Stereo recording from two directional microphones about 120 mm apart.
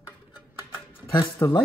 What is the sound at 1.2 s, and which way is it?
Speech, 25° left (ahead or behind).